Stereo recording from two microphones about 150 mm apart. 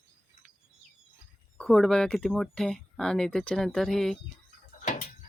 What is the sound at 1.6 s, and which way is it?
Speech, centre (ahead or behind).